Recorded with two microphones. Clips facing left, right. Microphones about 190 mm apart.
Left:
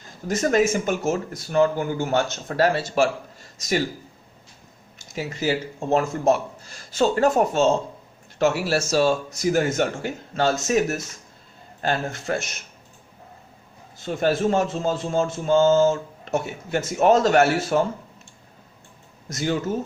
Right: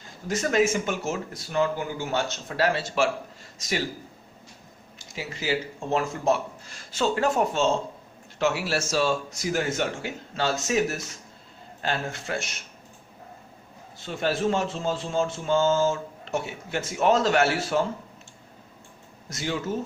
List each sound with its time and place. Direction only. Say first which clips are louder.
0.3 s speech: left 3 dB; 40° left (ahead or behind)
4.9 s speech: left 6 dB; 45° left (ahead or behind)
14.2 s speech: left 4 dB; 45° left (ahead or behind)
19.3 s speech: left 6 dB; 45° left (ahead or behind)